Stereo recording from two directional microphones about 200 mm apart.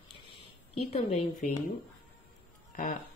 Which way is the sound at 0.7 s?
30° left (ahead or behind).